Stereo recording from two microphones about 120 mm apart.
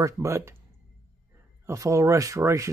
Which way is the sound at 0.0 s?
25° right (ahead or behind).